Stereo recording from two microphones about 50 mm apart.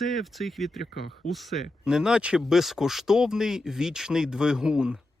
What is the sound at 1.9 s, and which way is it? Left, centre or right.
Speech, centre.